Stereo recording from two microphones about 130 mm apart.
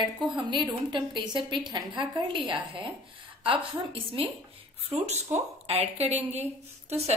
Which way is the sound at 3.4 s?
40° right (ahead or behind).